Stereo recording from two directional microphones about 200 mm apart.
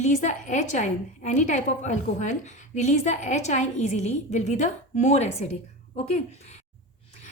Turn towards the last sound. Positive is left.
turn(degrees=35)  # may be behind; listen again after turning